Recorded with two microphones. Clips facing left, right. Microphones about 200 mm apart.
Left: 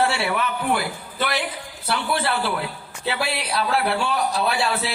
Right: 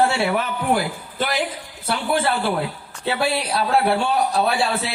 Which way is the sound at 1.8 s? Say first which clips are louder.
Right 3 dB; 45° right (ahead or behind).